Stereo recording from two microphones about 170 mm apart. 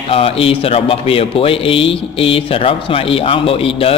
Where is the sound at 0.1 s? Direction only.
35° left (ahead or behind).